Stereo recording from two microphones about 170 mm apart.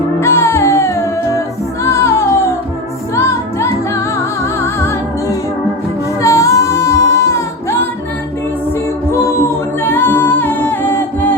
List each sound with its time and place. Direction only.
0.2 s music: 15° left (ahead or behind)
6.2 s music: 20° left (ahead or behind)
9.8 s a capella: 10° left (ahead or behind)